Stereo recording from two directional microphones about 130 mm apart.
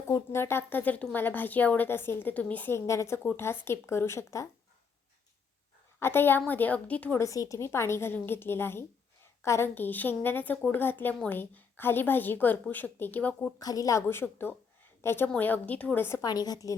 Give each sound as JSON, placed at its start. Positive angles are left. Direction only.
{"t": 0.1, "sound": "a woman's voice", "side_deg": 20}
{"t": 6.0, "sound": "a woman's voice", "side_deg": 15}
{"t": 7.2, "sound": "a woman's voice", "side_deg": 25}
{"t": 13.6, "sound": "a woman's voice", "side_deg": 30}
{"t": 16.3, "sound": "a woman's voice", "side_deg": 30}